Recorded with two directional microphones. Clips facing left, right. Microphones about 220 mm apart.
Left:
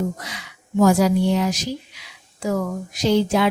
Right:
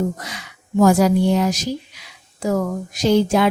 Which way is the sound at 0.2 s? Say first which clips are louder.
Right 2 dB; 45° right (ahead or behind).